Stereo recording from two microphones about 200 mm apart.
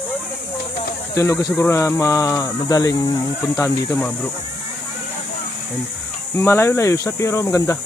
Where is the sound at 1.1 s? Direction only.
15° left (ahead or behind).